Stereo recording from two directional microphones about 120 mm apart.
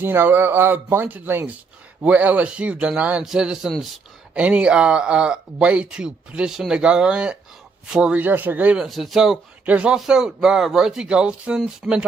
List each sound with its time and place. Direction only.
0.0 s speech: 20° right (ahead or behind)